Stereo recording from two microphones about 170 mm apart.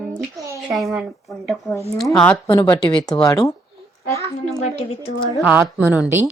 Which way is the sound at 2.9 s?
25° left (ahead or behind).